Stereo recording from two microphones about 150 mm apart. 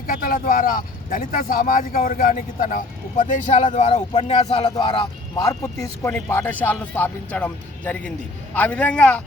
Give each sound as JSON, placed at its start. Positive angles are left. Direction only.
{"t": 0.1, "sound": "speech", "side_deg": 65}
{"t": 5.8, "sound": "speech", "side_deg": 20}